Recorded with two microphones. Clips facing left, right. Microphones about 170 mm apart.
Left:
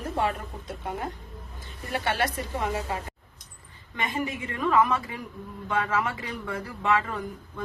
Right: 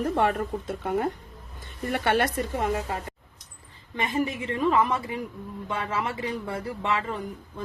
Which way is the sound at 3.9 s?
30° right (ahead or behind).